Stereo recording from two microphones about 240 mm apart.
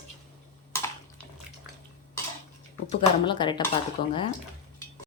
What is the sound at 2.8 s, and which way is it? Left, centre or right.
Speech, centre.